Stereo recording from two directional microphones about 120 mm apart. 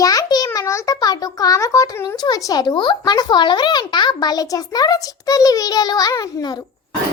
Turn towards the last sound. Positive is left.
turn(degrees=30)  # may be behind; listen again after turning